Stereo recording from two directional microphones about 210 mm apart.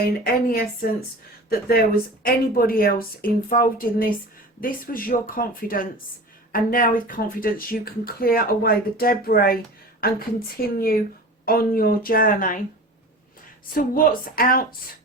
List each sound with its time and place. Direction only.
0.3 s speech: 45° left (ahead or behind)
13.7 s speech: 40° left (ahead or behind)